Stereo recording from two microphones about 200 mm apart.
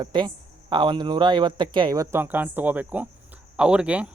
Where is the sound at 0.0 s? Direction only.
20° right (ahead or behind).